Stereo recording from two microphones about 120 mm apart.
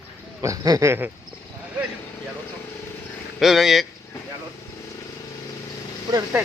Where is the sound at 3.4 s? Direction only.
Centre (ahead or behind).